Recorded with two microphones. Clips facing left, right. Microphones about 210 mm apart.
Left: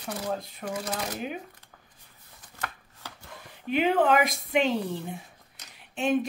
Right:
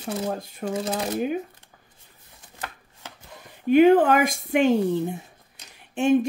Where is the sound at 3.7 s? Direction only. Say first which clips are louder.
Right 7 dB; 50° right (ahead or behind).